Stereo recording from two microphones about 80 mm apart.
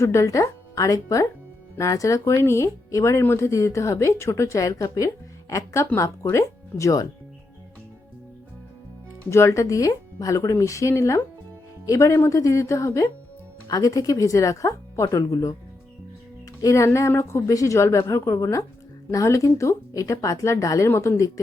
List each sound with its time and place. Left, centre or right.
0.0 s speech: left
9.3 s speech: left
12.4 s speech: left
16.6 s speech: left